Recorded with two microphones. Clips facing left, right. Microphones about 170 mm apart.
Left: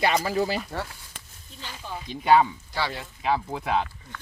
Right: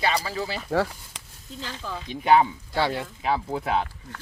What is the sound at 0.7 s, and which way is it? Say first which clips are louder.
Speech: right 9 dB; 90° right.